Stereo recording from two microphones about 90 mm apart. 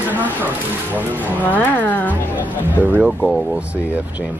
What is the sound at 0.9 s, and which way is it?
Speech, 20° left (ahead or behind).